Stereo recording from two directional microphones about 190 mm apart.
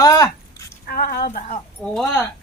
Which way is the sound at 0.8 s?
50° left (ahead or behind).